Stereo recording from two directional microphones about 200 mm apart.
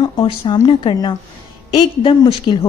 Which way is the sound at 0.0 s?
20° left (ahead or behind).